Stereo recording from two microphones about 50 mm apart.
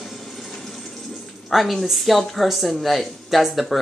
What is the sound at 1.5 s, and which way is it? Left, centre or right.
A woman's voice, centre.